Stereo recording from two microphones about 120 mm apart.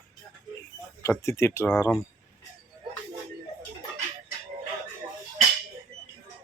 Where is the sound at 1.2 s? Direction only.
20° left (ahead or behind).